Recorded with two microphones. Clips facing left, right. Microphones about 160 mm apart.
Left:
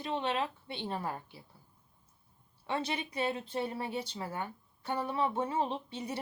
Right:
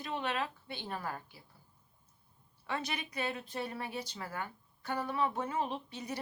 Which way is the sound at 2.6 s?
25° left (ahead or behind).